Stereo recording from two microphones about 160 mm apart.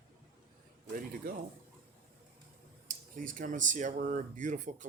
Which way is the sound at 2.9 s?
55° right (ahead or behind).